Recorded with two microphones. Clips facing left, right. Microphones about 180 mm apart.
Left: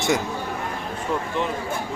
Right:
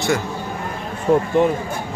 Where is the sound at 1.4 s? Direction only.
50° right (ahead or behind).